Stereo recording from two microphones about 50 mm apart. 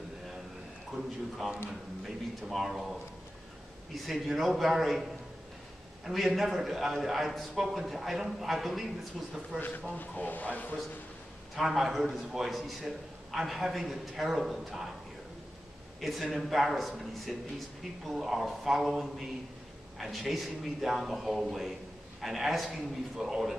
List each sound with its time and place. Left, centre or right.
1.7 s a man's voice: centre
6.0 s a man's voice: centre
9.9 s speech: left
11.5 s a man's voice: centre
16.0 s a man's voice: centre